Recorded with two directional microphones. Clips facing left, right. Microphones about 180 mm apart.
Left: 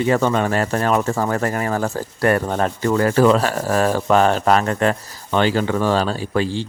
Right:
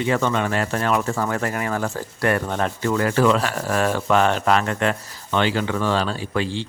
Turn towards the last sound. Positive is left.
turn(degrees=40)  # may be behind; listen again after turning